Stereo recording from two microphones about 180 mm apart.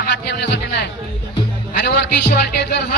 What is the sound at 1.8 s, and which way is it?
Music, 75° left (ahead or behind).